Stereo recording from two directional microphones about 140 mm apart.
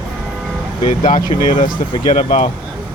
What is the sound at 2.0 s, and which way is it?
Speech, 40° left (ahead or behind).